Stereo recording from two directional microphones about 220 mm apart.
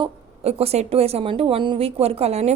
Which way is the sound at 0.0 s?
30° right (ahead or behind).